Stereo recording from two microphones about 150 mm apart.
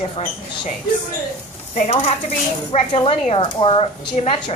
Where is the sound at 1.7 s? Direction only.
50° left (ahead or behind).